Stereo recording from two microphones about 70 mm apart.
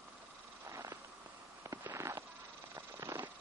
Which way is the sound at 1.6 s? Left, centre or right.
Right.